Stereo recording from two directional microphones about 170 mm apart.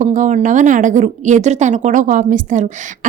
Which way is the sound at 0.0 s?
50° right (ahead or behind).